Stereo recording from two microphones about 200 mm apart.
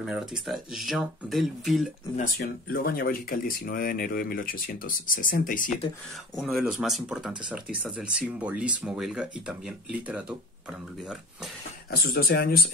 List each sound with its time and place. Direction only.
0.0 s speech: 5° right (ahead or behind)
2.1 s speech: 45° left (ahead or behind)
6.3 s speech: centre (ahead or behind)
11.9 s speech: 50° left (ahead or behind)